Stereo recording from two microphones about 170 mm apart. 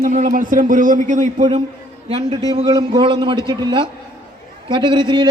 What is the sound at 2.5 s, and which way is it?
A man's voice, 30° right (ahead or behind).